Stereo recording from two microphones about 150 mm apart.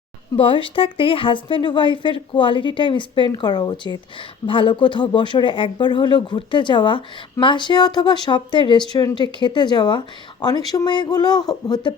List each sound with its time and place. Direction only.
0.3 s speech: 35° left (ahead or behind)